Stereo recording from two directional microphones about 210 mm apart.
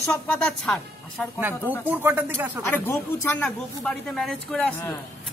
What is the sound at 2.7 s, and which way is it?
Speech, 10° left (ahead or behind).